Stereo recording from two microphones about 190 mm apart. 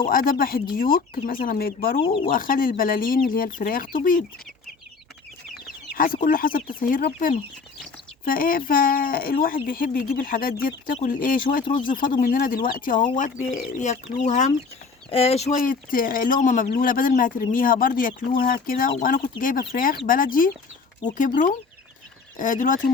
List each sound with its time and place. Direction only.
0.0 s speech: 45° left (ahead or behind)
2.0 s speech: 25° left (ahead or behind)
2.3 s speech: 50° left (ahead or behind)
5.9 s speech: 50° left (ahead or behind)